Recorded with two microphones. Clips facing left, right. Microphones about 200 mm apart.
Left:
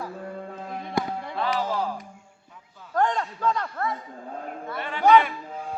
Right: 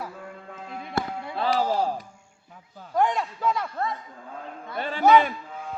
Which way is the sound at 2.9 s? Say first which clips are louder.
Right 1 dB; 10° right (ahead or behind).